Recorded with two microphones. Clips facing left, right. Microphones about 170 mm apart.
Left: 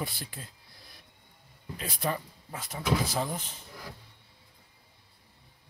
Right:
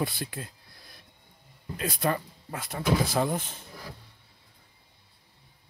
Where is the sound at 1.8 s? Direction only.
55° right (ahead or behind).